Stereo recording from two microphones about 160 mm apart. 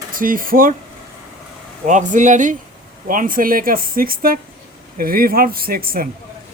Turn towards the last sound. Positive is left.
turn(degrees=-65)  # may be behind; listen again after turning